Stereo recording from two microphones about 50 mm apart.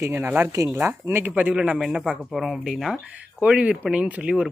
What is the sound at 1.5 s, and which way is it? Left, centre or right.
Speech, right.